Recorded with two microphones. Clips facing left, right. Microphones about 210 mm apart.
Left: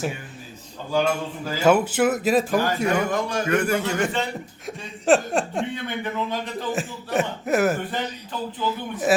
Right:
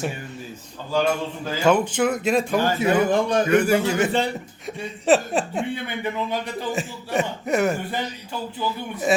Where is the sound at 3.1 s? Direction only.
30° right (ahead or behind).